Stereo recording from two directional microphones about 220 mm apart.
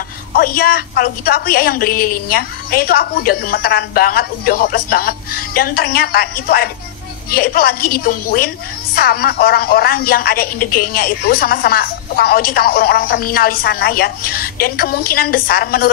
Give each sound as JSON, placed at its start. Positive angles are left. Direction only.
{"t": 0.3, "sound": "speech", "side_deg": 40}